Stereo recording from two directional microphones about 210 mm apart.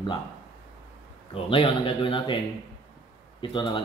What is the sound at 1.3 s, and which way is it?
Speech, 25° left (ahead or behind).